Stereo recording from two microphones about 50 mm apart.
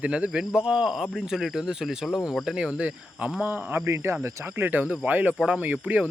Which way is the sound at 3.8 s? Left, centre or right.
Right.